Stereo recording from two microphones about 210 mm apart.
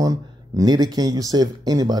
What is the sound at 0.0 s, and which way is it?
Speech, 15° right (ahead or behind).